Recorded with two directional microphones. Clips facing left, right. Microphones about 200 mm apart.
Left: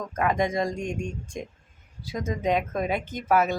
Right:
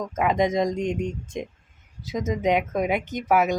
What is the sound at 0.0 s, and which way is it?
Speech, 20° right (ahead or behind).